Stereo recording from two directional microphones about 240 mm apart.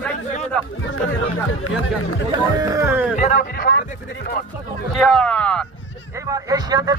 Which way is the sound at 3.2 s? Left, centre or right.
Left.